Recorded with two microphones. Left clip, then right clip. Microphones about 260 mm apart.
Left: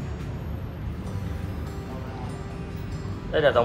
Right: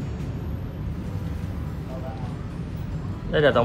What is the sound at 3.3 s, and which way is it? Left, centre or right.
Music, right.